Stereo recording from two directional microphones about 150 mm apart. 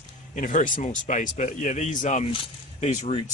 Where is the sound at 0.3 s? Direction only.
60° left (ahead or behind).